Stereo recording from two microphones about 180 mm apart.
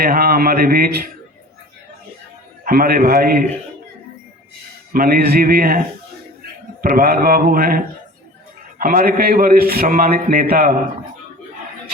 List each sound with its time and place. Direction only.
0.0 s speech: 55° right (ahead or behind)
2.6 s a man's voice: 55° right (ahead or behind)
4.9 s speech: 55° right (ahead or behind)
6.8 s a man's voice: 50° right (ahead or behind)
8.8 s a man's voice: 50° right (ahead or behind)